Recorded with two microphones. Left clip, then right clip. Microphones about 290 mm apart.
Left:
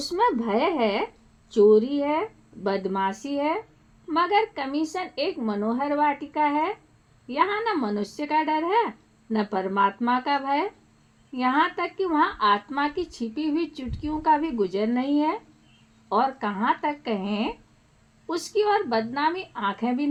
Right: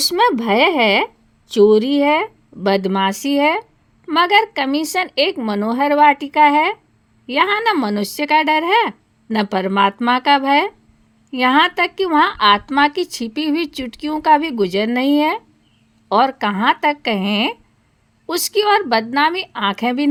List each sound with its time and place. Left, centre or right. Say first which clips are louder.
0.0 s speech: right 8 dB; right